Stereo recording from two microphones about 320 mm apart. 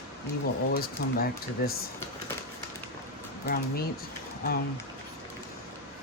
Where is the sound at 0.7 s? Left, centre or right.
Left.